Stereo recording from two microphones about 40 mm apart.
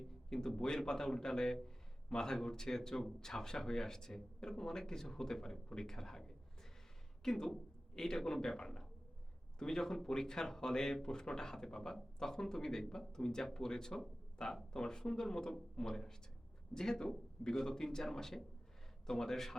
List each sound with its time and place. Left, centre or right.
0.0 s a man's voice: centre